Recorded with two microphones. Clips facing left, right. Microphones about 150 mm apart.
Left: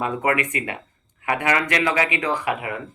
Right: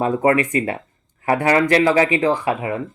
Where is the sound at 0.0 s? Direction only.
30° right (ahead or behind).